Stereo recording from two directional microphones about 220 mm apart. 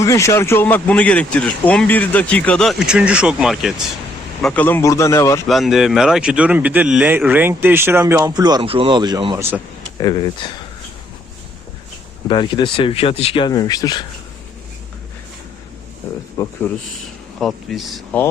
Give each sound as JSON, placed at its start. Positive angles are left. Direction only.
{"t": 0.0, "sound": "speech", "side_deg": 15}
{"t": 5.5, "sound": "speech", "side_deg": 0}
{"t": 10.0, "sound": "speech", "side_deg": 20}
{"t": 12.3, "sound": "speech", "side_deg": 20}
{"t": 16.4, "sound": "speech", "side_deg": 10}